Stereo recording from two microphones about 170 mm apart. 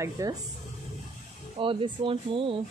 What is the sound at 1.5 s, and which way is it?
Speech, 30° right (ahead or behind).